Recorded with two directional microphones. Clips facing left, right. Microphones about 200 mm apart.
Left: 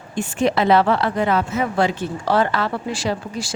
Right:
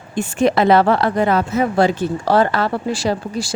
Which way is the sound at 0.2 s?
45° right (ahead or behind).